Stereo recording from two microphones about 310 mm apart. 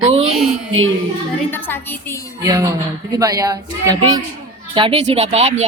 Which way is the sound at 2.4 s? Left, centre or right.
Centre.